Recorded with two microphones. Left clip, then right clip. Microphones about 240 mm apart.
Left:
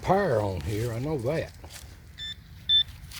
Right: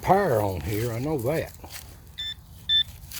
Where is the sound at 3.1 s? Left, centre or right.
Centre.